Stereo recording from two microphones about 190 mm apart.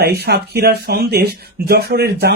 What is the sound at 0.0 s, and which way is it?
Speech, 55° right (ahead or behind).